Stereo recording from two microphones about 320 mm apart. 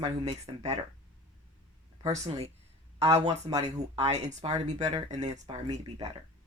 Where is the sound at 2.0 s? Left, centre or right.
Centre.